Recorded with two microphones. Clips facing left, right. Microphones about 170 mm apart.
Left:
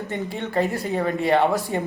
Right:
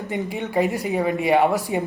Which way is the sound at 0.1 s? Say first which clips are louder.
Right 3 dB; 15° right (ahead or behind).